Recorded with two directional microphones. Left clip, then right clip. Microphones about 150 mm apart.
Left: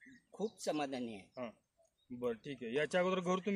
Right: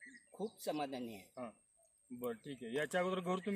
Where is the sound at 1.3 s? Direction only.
15° left (ahead or behind).